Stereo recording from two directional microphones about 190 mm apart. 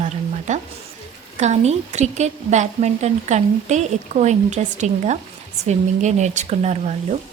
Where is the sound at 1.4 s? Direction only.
35° right (ahead or behind).